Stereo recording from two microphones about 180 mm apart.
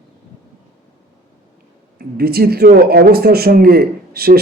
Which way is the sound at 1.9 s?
60° right (ahead or behind).